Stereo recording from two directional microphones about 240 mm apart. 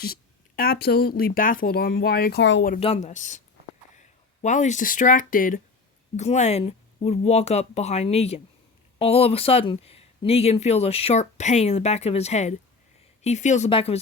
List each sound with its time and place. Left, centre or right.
0.0 s speech: left
2.6 s speech: left